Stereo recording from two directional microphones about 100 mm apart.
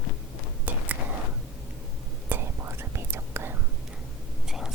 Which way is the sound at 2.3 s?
25° right (ahead or behind).